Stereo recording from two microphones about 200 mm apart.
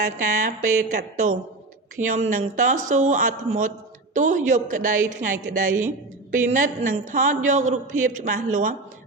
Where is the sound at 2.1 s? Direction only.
40° right (ahead or behind).